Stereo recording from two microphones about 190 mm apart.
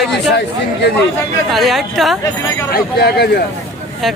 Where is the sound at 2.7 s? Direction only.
55° left (ahead or behind).